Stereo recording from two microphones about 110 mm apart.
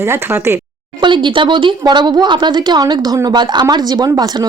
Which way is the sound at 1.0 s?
45° right (ahead or behind).